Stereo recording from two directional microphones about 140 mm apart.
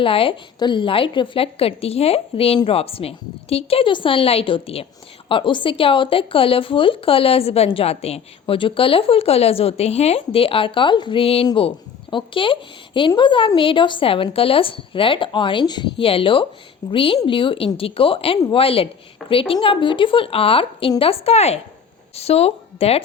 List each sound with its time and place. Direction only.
0.0 s a woman's voice: 40° left (ahead or behind)